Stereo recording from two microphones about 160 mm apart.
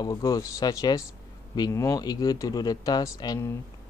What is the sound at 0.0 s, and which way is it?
Speech, 25° left (ahead or behind).